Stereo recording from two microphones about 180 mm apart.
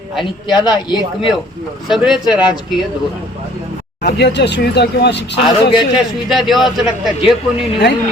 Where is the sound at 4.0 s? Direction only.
65° left (ahead or behind).